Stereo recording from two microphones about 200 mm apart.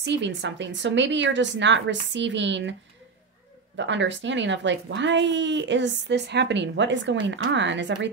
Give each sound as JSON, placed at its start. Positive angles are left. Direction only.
{"t": 0.0, "sound": "speech", "side_deg": -60}
{"t": 3.7, "sound": "speech", "side_deg": -65}